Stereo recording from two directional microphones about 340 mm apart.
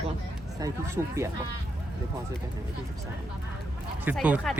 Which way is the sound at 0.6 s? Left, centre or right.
Centre.